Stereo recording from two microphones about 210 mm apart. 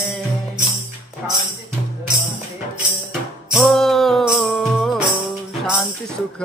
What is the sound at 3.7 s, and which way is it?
Music, centre (ahead or behind).